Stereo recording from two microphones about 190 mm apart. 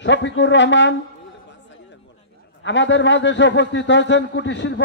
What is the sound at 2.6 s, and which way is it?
A man's voice, 70° left (ahead or behind).